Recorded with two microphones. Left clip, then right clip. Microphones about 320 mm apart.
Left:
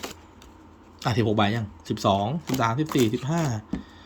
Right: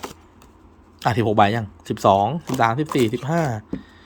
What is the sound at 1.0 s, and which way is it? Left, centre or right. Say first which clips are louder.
Speech: right 7 dB; centre.